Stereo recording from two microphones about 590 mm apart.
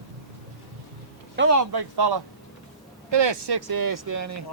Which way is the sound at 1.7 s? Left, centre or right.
Right.